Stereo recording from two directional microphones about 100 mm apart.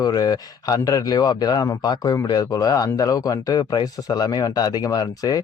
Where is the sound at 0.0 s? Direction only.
40° left (ahead or behind).